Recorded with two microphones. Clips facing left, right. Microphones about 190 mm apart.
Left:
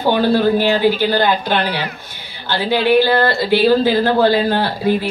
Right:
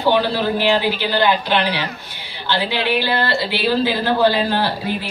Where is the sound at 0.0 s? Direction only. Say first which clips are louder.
Left 4 dB; 45° left (ahead or behind).